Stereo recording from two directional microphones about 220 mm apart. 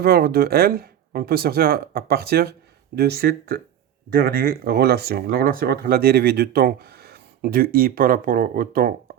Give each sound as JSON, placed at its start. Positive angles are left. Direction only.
{"t": 0.0, "sound": "speech", "side_deg": -45}